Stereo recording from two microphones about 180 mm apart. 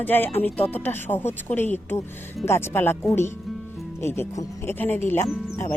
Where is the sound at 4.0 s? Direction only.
15° left (ahead or behind).